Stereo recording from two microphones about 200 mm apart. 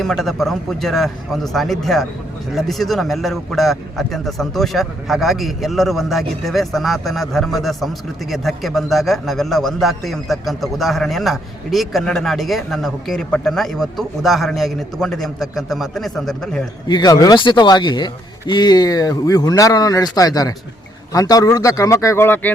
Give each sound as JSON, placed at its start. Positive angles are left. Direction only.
{"t": 0.0, "sound": "a man's voice", "side_deg": 0}
{"t": 16.9, "sound": "a man's voice", "side_deg": 20}